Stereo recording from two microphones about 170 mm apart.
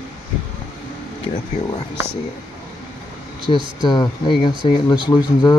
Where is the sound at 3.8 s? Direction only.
25° left (ahead or behind).